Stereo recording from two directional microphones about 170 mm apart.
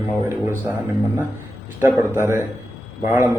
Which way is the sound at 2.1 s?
15° right (ahead or behind).